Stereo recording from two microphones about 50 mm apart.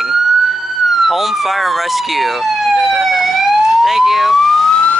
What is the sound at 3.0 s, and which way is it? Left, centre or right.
Emergency vehicle, centre.